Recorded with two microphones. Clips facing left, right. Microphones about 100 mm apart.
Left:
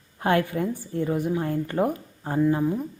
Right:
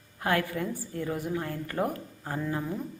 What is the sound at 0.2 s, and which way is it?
A woman's voice, 25° left (ahead or behind).